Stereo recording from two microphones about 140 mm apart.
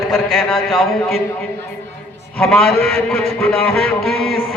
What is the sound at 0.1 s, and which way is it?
Speech, centre (ahead or behind).